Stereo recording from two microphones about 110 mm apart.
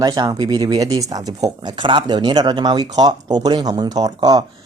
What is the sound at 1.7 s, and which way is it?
Speech, 45° right (ahead or behind).